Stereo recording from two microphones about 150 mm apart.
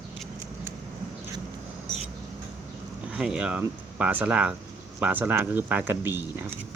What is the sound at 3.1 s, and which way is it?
Speech, 5° right (ahead or behind).